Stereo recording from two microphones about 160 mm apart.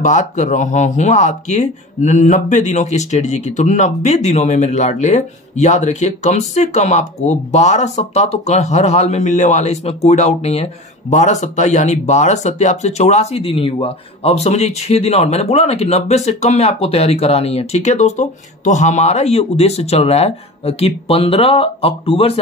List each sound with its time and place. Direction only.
0.0 s speech: 50° left (ahead or behind)